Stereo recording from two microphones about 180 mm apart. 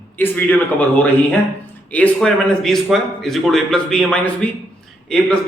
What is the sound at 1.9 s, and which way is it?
A man's voice, 5° left (ahead or behind).